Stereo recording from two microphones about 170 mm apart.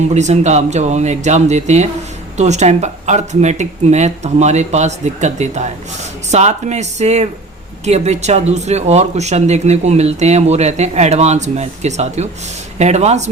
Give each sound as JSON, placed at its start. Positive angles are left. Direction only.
{"t": 0.1, "sound": "speech", "side_deg": -45}